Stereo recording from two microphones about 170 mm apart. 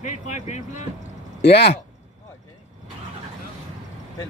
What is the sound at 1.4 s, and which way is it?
Speech, 75° left (ahead or behind).